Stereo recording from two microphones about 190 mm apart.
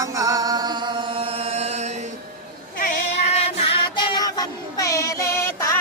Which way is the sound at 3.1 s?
35° left (ahead or behind).